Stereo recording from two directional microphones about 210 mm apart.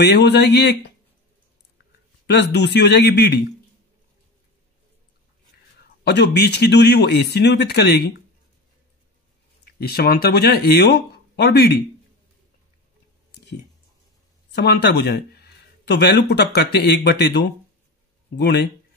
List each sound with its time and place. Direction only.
0.0 s speech: 50° left (ahead or behind)
2.2 s speech: 55° left (ahead or behind)
6.0 s speech: 50° left (ahead or behind)
9.8 s speech: 45° left (ahead or behind)
14.5 s speech: 50° left (ahead or behind)